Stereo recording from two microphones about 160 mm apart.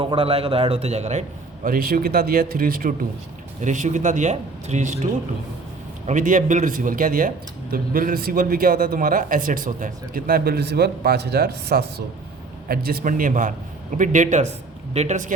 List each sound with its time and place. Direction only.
0.0 s a man's voice: 35° right (ahead or behind)
1.6 s speech: 65° right (ahead or behind)
3.6 s speech: 50° right (ahead or behind)
6.1 s speech: 55° right (ahead or behind); by 11.9 s 85° right
12.6 s speech: 70° right (ahead or behind); by 15.3 s 45° right (ahead or behind)